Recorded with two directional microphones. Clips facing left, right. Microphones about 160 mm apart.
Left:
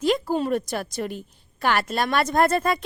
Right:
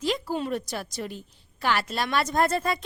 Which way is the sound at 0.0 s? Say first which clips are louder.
Left 5 dB; 50° left (ahead or behind).